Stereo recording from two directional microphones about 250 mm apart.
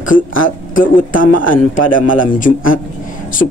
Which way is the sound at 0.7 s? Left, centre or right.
Left.